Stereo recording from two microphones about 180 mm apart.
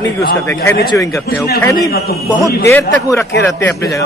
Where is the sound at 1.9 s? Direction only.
60° left (ahead or behind).